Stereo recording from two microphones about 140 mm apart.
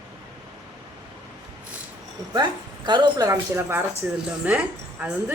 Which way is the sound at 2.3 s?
30° right (ahead or behind).